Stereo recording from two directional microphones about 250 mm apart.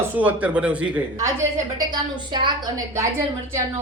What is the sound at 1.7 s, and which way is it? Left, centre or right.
Speech, centre.